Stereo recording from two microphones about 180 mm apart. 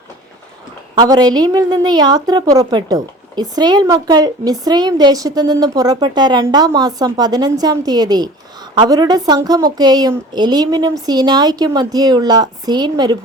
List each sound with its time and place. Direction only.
0.9 s a woman's voice: 20° right (ahead or behind)